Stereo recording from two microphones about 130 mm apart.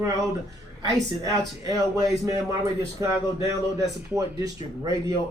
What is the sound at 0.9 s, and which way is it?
Speech, 25° right (ahead or behind).